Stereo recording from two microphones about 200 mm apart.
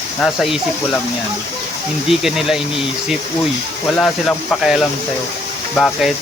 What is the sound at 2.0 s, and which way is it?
Speech, centre (ahead or behind).